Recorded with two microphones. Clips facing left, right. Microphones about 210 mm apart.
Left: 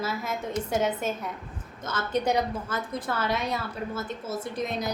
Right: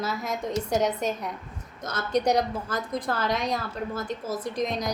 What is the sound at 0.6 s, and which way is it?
Speech, 5° left (ahead or behind).